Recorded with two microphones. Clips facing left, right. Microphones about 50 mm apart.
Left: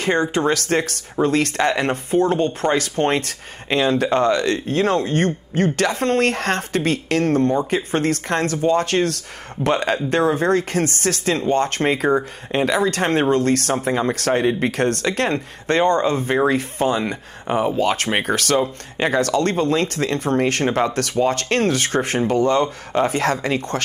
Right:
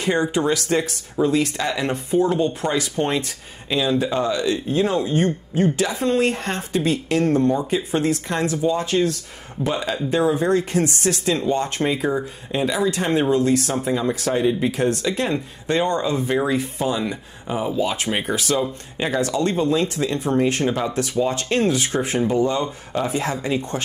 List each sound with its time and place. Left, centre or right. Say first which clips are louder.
0.0 s speech: left 1 dB; left
12.1 s speech: left 4 dB; left
12.6 s speech: left 2 dB; left